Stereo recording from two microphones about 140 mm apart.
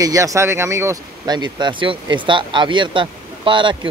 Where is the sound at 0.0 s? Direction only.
25° right (ahead or behind).